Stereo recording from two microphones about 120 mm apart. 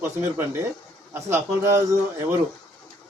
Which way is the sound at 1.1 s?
25° right (ahead or behind).